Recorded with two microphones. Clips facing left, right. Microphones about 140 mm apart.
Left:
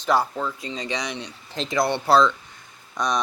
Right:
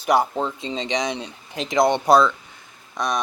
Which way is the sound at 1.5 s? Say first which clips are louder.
Right 4 dB; 15° right (ahead or behind).